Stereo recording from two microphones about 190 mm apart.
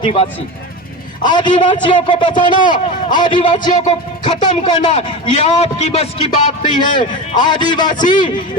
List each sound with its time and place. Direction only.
0.0 s a man's voice: 30° left (ahead or behind)
2.5 s a man's voice: 45° left (ahead or behind)
3.2 s a man's voice: 25° left (ahead or behind)
7.3 s a man's voice: 25° left (ahead or behind)